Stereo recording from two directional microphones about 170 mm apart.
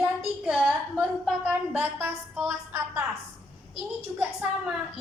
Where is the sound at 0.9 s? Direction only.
5° right (ahead or behind).